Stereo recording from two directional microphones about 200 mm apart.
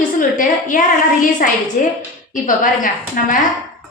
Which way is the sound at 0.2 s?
40° left (ahead or behind).